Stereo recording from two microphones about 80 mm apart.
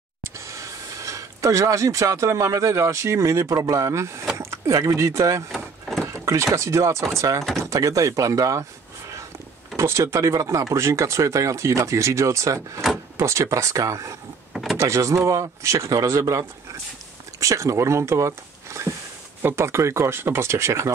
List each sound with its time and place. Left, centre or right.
0.2 s speech: right
5.5 s vehicle: centre
6.2 s speech: right
9.8 s speech: right
14.5 s power windows: centre
14.8 s speech: right